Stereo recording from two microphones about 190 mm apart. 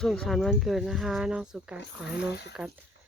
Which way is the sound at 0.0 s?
Centre (ahead or behind).